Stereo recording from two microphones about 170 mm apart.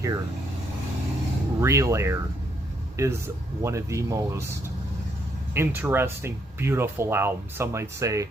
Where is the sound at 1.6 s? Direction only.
15° right (ahead or behind).